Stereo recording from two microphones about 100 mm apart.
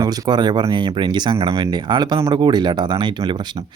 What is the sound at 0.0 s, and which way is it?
Speech, 45° right (ahead or behind).